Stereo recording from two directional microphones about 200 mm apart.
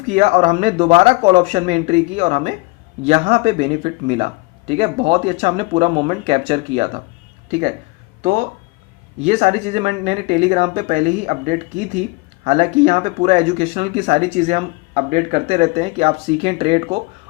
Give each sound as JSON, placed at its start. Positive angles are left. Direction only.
{"t": 0.0, "sound": "speech", "side_deg": -35}
{"t": 8.2, "sound": "speech", "side_deg": -35}